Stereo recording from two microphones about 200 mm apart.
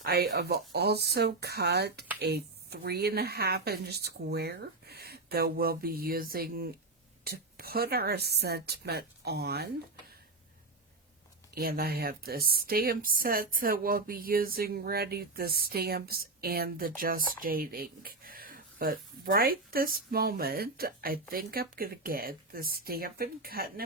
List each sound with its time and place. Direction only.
0.0 s speech: 50° right (ahead or behind)
11.5 s speech: 50° right (ahead or behind)